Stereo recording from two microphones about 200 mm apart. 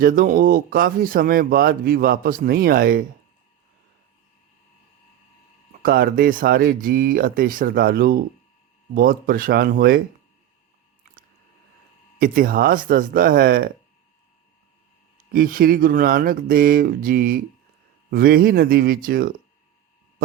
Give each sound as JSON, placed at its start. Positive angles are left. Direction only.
{"t": 0.0, "sound": "speech", "side_deg": -45}
{"t": 5.8, "sound": "speech", "side_deg": -45}
{"t": 12.2, "sound": "speech", "side_deg": -45}
{"t": 15.3, "sound": "speech", "side_deg": -45}